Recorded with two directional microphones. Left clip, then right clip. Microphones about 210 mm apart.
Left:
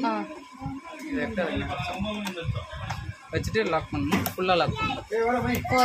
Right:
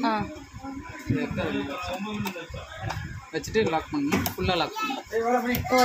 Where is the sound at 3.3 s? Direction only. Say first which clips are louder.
Right 1 dB; 20° left (ahead or behind).